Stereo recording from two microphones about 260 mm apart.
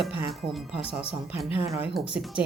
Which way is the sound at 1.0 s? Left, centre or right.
Left.